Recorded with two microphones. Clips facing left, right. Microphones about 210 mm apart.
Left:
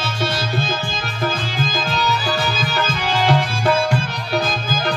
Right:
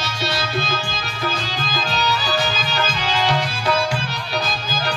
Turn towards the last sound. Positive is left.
turn(degrees=55)  # may be behind; listen again after turning